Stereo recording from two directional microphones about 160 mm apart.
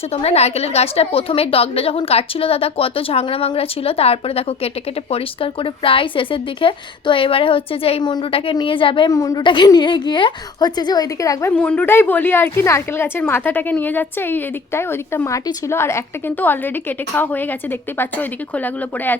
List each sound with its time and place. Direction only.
0.1 s a woman's voice: 40° left (ahead or behind); by 11.5 s 20° left (ahead or behind)
11.5 s a woman's voice: 5° left (ahead or behind)